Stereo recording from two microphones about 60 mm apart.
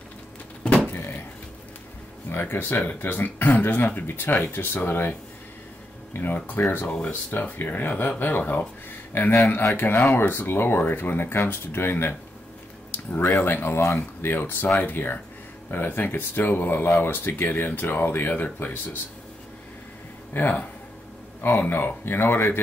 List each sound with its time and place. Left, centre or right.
2.3 s speech: left
6.1 s speech: left
7.9 s speech: left
8.2 s speech: left
13.4 s speech: left
20.3 s speech: left